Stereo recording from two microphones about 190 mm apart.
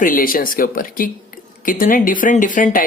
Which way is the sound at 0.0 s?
45° left (ahead or behind).